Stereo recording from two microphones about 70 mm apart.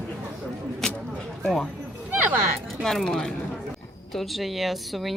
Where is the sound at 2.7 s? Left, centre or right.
Centre.